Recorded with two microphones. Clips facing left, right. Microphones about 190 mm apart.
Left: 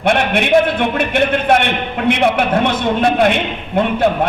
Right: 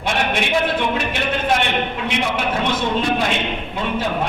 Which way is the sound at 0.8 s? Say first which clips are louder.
Left 6 dB; 60° left (ahead or behind).